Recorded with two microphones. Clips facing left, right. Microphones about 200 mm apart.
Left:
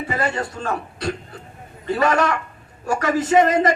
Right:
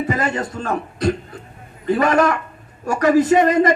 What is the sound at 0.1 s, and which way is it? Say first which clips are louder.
A man's voice: right 2 dB; 45° right (ahead or behind).